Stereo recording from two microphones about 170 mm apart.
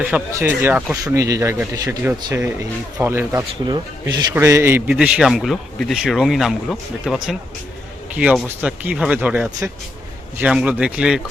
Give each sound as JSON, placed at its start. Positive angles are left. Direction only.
{"t": 0.0, "sound": "speech", "side_deg": -10}
{"t": 4.9, "sound": "speech", "side_deg": -5}